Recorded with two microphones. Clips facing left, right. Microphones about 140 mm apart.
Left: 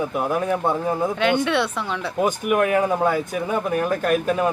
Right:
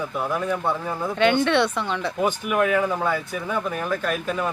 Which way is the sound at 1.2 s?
Centre (ahead or behind).